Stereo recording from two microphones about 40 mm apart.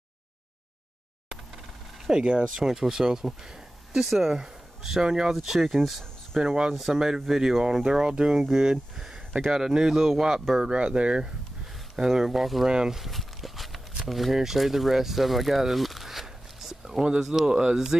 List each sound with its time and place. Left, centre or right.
2.0 s speech: right
2.5 s speech: centre
6.4 s speech: centre
10.7 s speech: right
12.0 s speech: centre
12.6 s speech: centre
13.0 s walk: centre
17.5 s speech: centre